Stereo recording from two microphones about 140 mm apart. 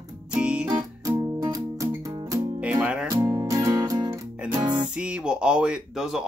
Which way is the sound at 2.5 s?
10° right (ahead or behind).